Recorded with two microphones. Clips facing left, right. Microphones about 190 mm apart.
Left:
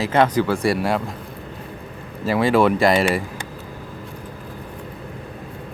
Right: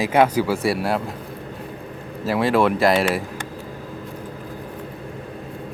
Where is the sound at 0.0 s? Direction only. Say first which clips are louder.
Even; 10° right (ahead or behind).